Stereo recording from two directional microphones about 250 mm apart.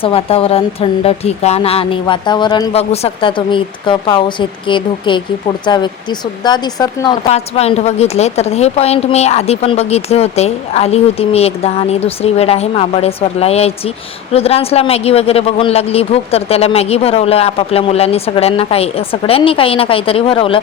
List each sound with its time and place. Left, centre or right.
0.0 s speech: left